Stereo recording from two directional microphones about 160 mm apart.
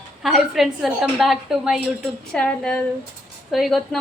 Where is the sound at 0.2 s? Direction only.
Centre (ahead or behind).